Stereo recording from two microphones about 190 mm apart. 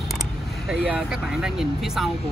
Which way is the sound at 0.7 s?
5° right (ahead or behind).